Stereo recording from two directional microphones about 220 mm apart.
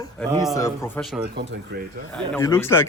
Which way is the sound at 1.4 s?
50° right (ahead or behind).